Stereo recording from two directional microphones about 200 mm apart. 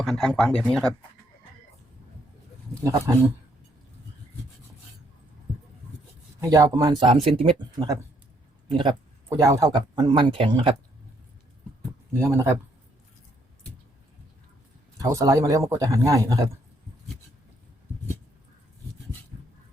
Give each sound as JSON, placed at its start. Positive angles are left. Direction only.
{"t": 0.0, "sound": "speech", "side_deg": 0}
{"t": 6.5, "sound": "speech", "side_deg": -20}
{"t": 12.2, "sound": "speech", "side_deg": -15}
{"t": 14.9, "sound": "speech", "side_deg": -15}